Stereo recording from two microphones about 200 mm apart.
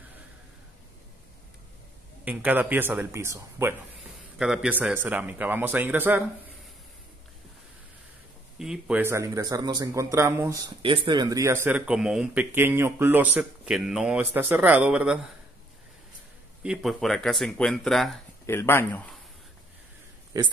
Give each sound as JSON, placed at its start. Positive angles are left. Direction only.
{"t": 2.2, "sound": "speech", "side_deg": -10}
{"t": 8.5, "sound": "speech", "side_deg": -5}
{"t": 16.6, "sound": "speech", "side_deg": 0}
{"t": 18.5, "sound": "speech", "side_deg": 10}
{"t": 20.3, "sound": "speech", "side_deg": -15}